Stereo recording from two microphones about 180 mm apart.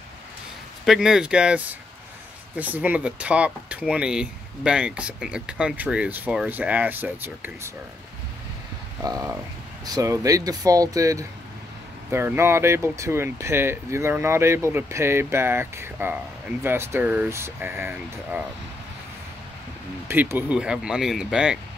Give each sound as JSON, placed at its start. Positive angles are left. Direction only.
{"t": 0.8, "sound": "speech", "side_deg": -5}
{"t": 9.0, "sound": "speech", "side_deg": -15}
{"t": 20.1, "sound": "speech", "side_deg": -10}